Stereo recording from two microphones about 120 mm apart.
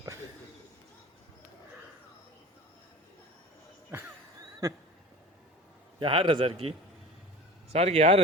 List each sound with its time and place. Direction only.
4.6 s a sound: 25° right (ahead or behind)
6.0 s a man's voice: 45° right (ahead or behind)
7.7 s speech: 60° right (ahead or behind)